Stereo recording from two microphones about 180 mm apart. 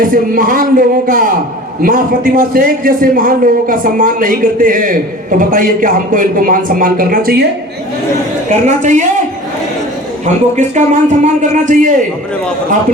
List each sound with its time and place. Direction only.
0.0 s a man's voice: 50° right (ahead or behind)
8.4 s a man's voice: 45° right (ahead or behind)
10.6 s a man's voice: 40° right (ahead or behind)